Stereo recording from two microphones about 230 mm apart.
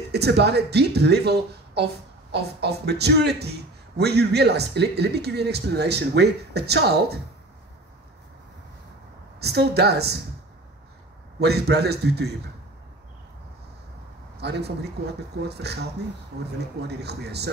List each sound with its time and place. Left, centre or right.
0.1 s speech: right
9.4 s speech: right
11.3 s speech: right
14.4 s speech: right